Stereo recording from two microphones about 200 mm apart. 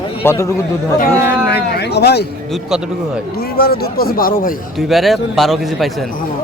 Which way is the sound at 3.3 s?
50° left (ahead or behind).